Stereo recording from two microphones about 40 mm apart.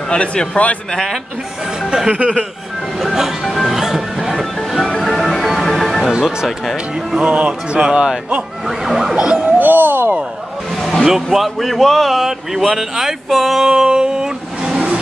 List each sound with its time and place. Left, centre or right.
0.1 s a man's voice: left
1.9 s speech: centre
3.0 s music: centre
6.1 s speech: centre
7.2 s speech: right
8.6 s a man's voice: centre
9.2 s speech: right
9.6 s a sound: right
10.8 s music: centre
11.3 s a man's voice: centre